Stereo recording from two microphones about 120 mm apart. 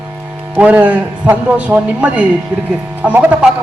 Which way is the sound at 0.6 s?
15° right (ahead or behind).